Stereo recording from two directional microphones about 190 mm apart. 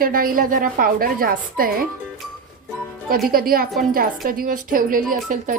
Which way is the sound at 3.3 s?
50° right (ahead or behind).